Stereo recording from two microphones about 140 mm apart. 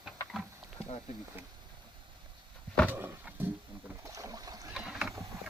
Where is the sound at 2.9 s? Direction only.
15° right (ahead or behind).